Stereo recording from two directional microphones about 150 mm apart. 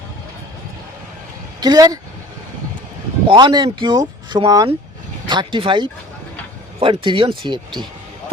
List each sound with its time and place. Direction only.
1.6 s speech: 25° right (ahead or behind)
3.2 s speech: 30° right (ahead or behind)